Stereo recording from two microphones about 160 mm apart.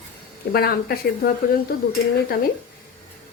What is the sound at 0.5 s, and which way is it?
Speech, 75° left (ahead or behind).